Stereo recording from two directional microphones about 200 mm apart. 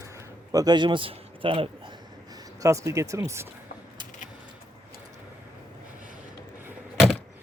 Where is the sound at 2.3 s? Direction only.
15° right (ahead or behind).